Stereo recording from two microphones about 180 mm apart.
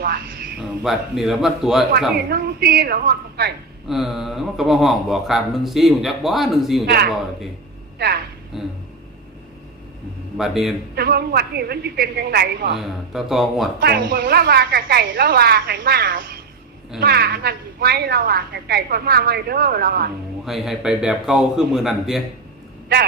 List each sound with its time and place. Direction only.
0.0 s speech: 60° right (ahead or behind)
0.8 s speech: centre (ahead or behind)
2.3 s a woman's voice: 60° right (ahead or behind)
3.8 s speech: centre (ahead or behind)
6.8 s a woman's voice: 60° right (ahead or behind)
8.5 s speech: centre (ahead or behind)
10.3 s speech: centre (ahead or behind)
10.9 s a woman's voice: 60° right (ahead or behind)
13.1 s speech: centre (ahead or behind)
13.7 s a woman's voice: 60° right (ahead or behind)
20.4 s speech: centre (ahead or behind)